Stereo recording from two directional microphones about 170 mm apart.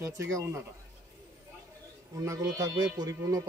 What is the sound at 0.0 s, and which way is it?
Speech, 15° right (ahead or behind).